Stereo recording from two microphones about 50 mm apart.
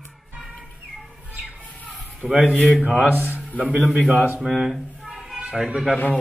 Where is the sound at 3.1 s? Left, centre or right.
Right.